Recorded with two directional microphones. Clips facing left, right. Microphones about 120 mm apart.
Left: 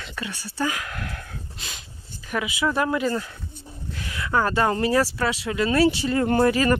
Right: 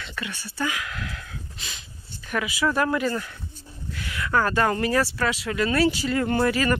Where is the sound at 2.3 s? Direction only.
20° left (ahead or behind).